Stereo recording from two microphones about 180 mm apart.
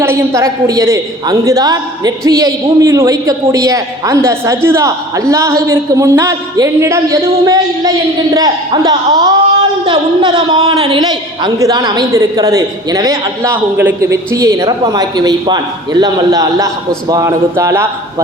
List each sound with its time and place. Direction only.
0.0 s a man's voice: 15° right (ahead or behind)